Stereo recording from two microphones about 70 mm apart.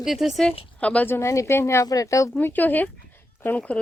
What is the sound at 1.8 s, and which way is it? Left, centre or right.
Speech, left.